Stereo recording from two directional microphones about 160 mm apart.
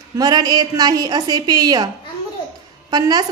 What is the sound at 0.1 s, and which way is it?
A woman's voice, 25° right (ahead or behind).